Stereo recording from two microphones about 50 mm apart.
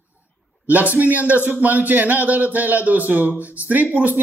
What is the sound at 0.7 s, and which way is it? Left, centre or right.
A man's voice, right.